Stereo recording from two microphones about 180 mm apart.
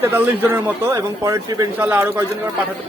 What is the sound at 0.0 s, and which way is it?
A man's voice, 10° right (ahead or behind).